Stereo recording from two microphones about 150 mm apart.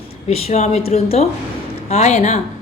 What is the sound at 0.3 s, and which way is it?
A woman's voice, 45° left (ahead or behind).